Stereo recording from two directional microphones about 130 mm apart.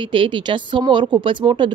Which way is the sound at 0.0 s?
40° right (ahead or behind).